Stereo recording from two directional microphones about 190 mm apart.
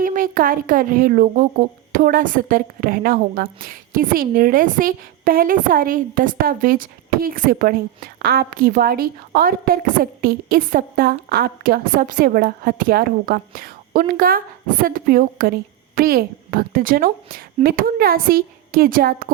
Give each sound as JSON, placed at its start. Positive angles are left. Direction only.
{"t": 0.0, "sound": "speech", "side_deg": -45}